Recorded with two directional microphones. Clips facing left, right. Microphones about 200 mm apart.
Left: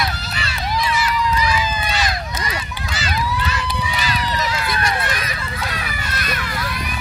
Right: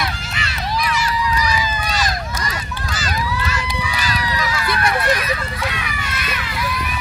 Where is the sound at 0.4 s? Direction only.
30° left (ahead or behind).